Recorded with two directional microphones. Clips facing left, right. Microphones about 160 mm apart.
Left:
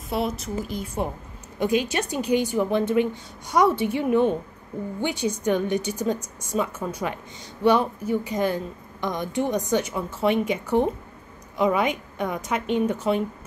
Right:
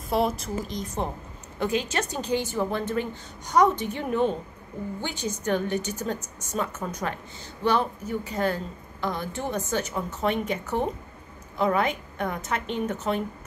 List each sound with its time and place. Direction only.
0.1 s a woman's voice: centre (ahead or behind)